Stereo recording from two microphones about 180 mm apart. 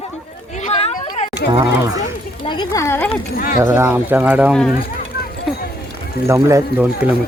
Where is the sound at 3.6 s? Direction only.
15° right (ahead or behind).